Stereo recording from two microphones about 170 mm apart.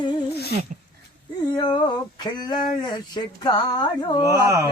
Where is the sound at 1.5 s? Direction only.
25° left (ahead or behind).